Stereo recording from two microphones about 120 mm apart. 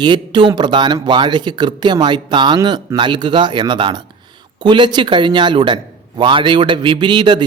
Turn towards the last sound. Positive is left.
turn(degrees=-40)  # may be behind; listen again after turning